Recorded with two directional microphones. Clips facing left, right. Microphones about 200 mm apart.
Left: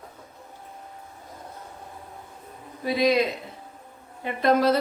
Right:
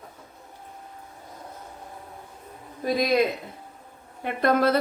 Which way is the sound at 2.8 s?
45° right (ahead or behind).